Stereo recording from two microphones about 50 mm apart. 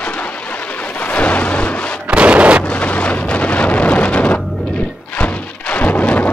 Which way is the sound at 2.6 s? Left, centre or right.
Left.